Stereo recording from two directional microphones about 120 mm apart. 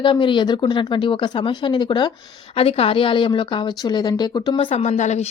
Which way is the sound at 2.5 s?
55° left (ahead or behind).